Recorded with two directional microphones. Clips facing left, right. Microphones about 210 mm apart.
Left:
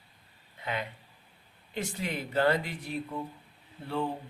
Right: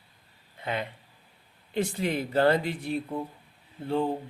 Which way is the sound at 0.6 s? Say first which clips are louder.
Right 3 dB; 30° right (ahead or behind).